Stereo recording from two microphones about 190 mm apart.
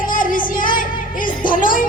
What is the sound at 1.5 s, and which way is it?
Music, 45° left (ahead or behind).